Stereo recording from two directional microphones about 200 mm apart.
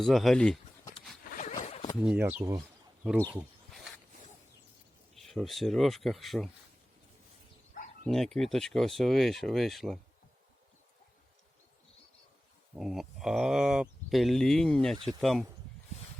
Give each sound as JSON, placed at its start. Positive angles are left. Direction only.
{"t": 0.0, "sound": "speech", "side_deg": 0}
{"t": 1.4, "sound": "zipper", "side_deg": 35}
{"t": 2.0, "sound": "speech", "side_deg": -5}
{"t": 3.0, "sound": "speech", "side_deg": 0}
{"t": 5.1, "sound": "speech", "side_deg": 0}
{"t": 8.0, "sound": "speech", "side_deg": 0}
{"t": 12.7, "sound": "speech", "side_deg": 0}